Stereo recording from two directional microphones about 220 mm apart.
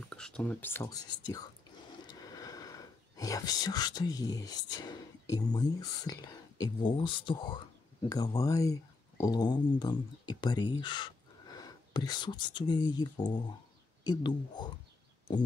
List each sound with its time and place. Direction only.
0.1 s speech: 5° left (ahead or behind); by 14.7 s 20° left (ahead or behind)